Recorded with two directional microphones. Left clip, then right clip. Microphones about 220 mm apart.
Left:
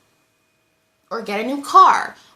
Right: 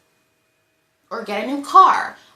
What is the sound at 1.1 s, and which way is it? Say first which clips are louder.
Speech: left 1 dB; 20° left (ahead or behind).